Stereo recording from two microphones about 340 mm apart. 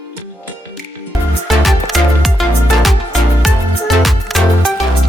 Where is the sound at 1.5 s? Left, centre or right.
Centre.